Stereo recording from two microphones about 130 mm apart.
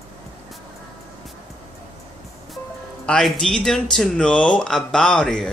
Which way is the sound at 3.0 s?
5° left (ahead or behind).